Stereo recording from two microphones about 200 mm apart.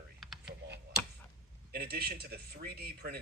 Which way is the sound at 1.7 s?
50° right (ahead or behind).